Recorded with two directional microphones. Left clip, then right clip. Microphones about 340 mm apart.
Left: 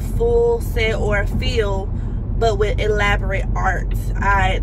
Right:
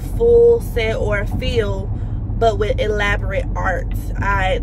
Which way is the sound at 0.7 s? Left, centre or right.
Centre.